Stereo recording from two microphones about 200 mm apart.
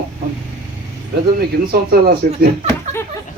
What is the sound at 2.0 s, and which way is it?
Speech, 50° right (ahead or behind).